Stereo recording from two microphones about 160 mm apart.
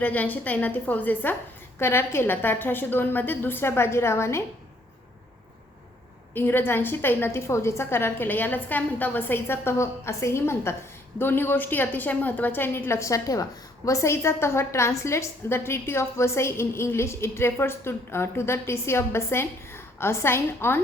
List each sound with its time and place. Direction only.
0.0 s a woman's voice: 10° left (ahead or behind)
6.3 s a woman's voice: 15° left (ahead or behind)